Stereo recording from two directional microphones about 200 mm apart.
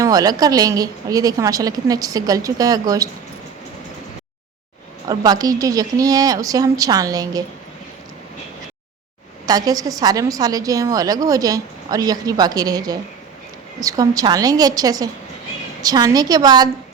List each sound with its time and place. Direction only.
0.0 s a woman's voice: 20° right (ahead or behind)
5.0 s a woman's voice: 20° right (ahead or behind)
9.5 s a woman's voice: 20° right (ahead or behind)